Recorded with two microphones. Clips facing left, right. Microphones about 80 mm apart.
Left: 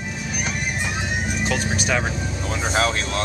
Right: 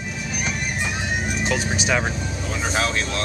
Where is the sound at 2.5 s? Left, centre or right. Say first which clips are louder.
Left 2 dB; left.